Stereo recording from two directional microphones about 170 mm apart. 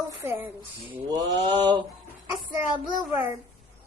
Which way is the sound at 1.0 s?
25° right (ahead or behind).